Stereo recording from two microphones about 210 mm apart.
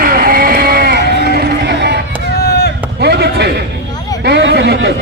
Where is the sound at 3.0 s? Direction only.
50° right (ahead or behind).